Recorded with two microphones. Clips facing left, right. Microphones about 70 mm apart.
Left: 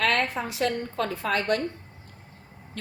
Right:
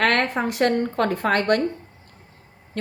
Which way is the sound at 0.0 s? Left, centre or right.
Right.